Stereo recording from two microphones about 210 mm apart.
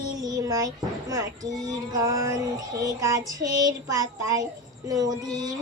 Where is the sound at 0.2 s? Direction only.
15° right (ahead or behind).